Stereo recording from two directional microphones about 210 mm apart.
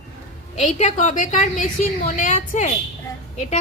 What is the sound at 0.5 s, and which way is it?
A woman's voice, 35° left (ahead or behind).